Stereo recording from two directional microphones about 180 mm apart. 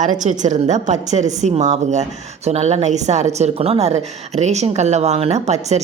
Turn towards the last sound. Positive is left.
turn(degrees=-40)  # may be behind; listen again after turning